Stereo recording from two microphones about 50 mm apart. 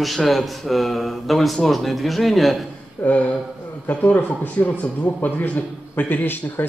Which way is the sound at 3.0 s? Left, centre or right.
Left.